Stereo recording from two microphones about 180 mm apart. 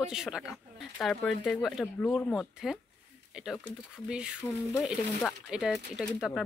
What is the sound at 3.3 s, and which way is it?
Speech, 5° right (ahead or behind).